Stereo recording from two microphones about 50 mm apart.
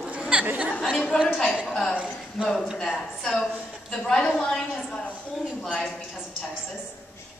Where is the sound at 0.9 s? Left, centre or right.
Centre.